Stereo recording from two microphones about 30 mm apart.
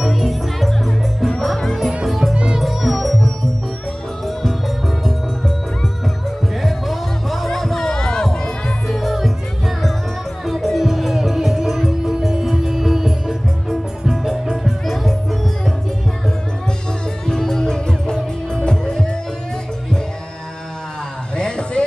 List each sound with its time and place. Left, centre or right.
0.0 s music: centre
2.3 s music: right
2.6 s music: centre
4.4 s music: centre
6.6 s music: centre
8.8 s music: centre
10.4 s music: centre
17.3 s music: centre
21.4 s music: left